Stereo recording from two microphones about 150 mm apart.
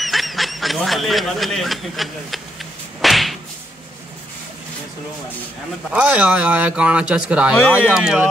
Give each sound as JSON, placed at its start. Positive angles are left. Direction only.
{"t": 0.0, "sound": "speech", "side_deg": 0}
{"t": 3.0, "sound": "whip", "side_deg": 0}
{"t": 5.9, "sound": "speech", "side_deg": -10}